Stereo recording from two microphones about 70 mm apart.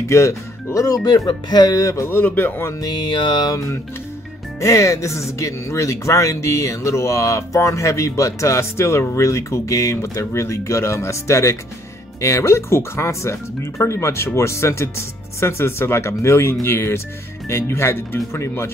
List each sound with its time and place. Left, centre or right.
0.0 s speech: left
2.0 s speech: left
2.8 s music: left
4.6 s speech: left